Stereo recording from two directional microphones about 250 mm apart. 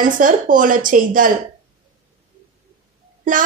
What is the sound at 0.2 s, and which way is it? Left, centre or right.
A woman's voice, right.